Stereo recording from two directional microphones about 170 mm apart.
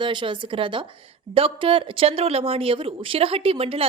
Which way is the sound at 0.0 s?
30° right (ahead or behind).